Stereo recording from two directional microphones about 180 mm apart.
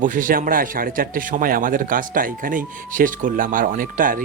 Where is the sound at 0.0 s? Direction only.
45° right (ahead or behind).